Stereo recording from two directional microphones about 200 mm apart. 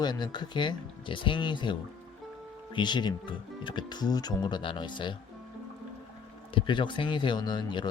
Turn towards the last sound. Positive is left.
turn(degrees=20)  # may be behind; listen again after turning